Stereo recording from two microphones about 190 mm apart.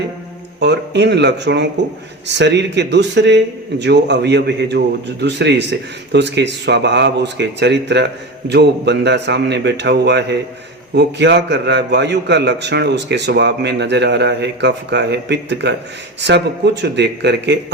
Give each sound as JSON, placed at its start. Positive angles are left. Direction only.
{"t": 0.6, "sound": "a man's voice", "side_deg": -65}
{"t": 16.8, "sound": "a man's voice", "side_deg": -65}